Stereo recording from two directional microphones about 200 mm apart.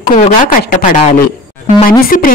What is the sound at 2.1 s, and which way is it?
Speech, 40° left (ahead or behind).